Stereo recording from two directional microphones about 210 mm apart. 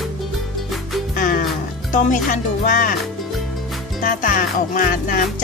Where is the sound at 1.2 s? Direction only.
40° left (ahead or behind).